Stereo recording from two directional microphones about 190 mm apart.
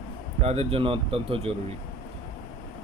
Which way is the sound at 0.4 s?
30° right (ahead or behind).